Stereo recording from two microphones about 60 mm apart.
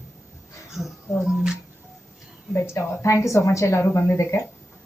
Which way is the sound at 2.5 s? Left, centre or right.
Left.